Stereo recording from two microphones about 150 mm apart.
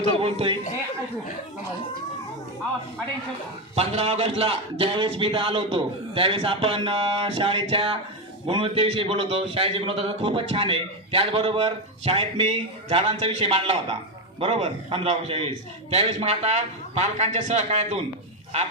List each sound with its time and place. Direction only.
0.0 s a man's voice: 40° right (ahead or behind)
3.8 s a man's voice: 45° right (ahead or behind)